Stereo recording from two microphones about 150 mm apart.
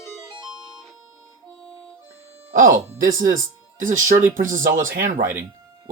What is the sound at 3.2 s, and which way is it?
Speech, 65° right (ahead or behind).